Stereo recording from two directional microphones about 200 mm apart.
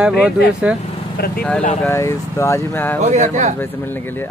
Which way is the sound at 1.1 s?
50° left (ahead or behind).